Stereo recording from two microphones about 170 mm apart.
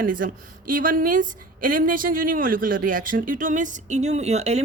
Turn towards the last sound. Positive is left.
turn(degrees=-40)  # may be behind; listen again after turning